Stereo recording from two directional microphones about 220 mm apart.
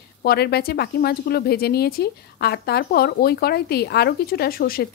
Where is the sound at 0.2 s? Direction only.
45° left (ahead or behind).